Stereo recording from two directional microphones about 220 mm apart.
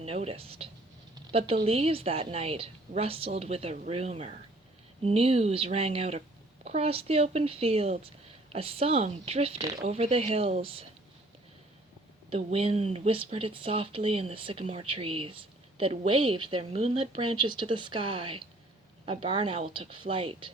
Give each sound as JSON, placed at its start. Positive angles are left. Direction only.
{"t": 0.0, "sound": "speech", "side_deg": -30}
{"t": 1.1, "sound": "a sound", "side_deg": -25}
{"t": 1.6, "sound": "speech", "side_deg": -25}
{"t": 12.3, "sound": "speech", "side_deg": -25}